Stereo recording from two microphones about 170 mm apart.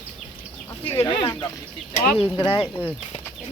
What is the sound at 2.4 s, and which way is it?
Speech, 30° left (ahead or behind).